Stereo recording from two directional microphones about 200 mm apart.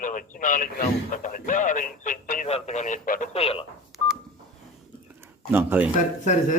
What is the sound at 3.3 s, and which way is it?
Speech, 30° left (ahead or behind).